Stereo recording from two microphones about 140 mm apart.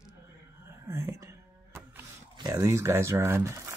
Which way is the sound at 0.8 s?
20° right (ahead or behind).